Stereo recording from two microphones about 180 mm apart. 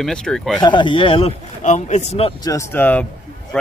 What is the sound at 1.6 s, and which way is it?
Speech, 40° left (ahead or behind).